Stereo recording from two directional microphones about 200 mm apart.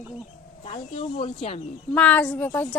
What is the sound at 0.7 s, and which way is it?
Speech, 30° left (ahead or behind).